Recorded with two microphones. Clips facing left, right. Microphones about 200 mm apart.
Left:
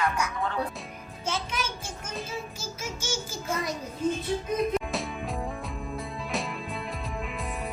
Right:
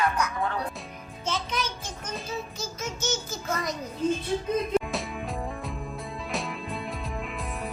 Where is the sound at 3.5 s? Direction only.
5° left (ahead or behind).